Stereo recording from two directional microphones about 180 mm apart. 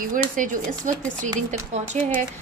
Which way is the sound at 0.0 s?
45° right (ahead or behind).